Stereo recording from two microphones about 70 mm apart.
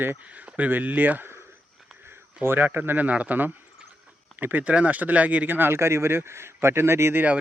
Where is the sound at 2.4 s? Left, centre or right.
Right.